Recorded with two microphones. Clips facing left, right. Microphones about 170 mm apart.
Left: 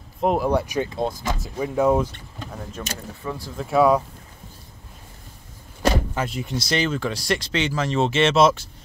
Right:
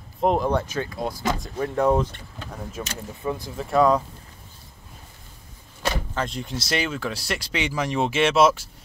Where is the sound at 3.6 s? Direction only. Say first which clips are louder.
Left 2 dB; 5° left (ahead or behind).